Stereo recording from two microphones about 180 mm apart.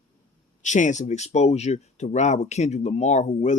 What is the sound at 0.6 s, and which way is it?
Speech, 40° left (ahead or behind).